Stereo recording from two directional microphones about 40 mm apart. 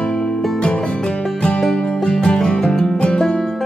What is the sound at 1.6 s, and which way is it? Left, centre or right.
Music, centre.